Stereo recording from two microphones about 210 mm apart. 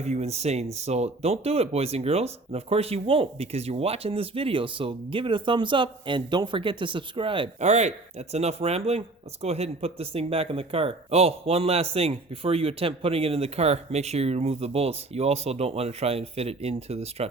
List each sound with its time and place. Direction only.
0.0 s speech: 30° right (ahead or behind)